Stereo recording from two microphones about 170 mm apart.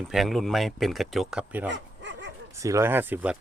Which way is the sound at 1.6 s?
90° right.